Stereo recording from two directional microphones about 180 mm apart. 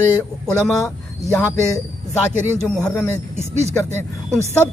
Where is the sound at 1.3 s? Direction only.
15° left (ahead or behind).